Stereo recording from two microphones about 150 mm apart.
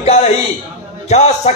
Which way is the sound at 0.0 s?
45° left (ahead or behind).